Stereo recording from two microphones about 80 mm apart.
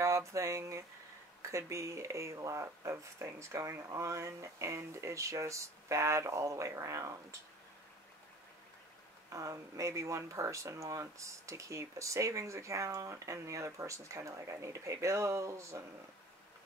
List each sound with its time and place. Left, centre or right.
0.0 s a sound: right
1.4 s speech: right
9.3 s speech: right